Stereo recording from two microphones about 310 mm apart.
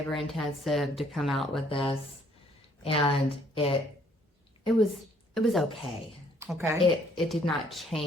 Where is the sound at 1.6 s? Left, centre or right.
Centre.